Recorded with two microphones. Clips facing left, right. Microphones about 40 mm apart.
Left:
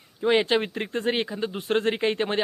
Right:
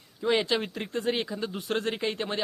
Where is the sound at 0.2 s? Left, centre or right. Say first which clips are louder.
Left 4 dB; left.